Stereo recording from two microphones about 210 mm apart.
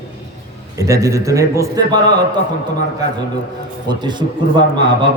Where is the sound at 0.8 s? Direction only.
15° right (ahead or behind).